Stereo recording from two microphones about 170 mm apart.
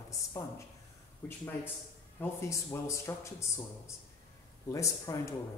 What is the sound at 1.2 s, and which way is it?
A man's voice, 15° left (ahead or behind).